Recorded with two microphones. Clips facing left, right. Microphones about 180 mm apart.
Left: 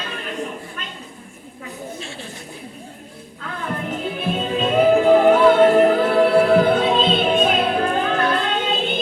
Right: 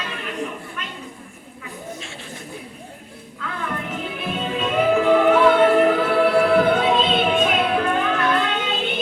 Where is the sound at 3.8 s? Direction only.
35° left (ahead or behind).